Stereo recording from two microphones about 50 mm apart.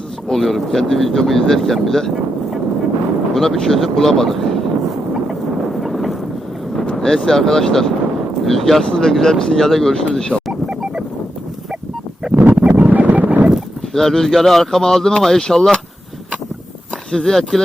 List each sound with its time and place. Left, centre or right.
0.3 s speech: centre
3.3 s speech: centre
5.8 s vehicle: centre
6.9 s speech: centre
12.3 s a sound: right
12.7 s a sound: right
13.9 s speech: centre
17.1 s speech: centre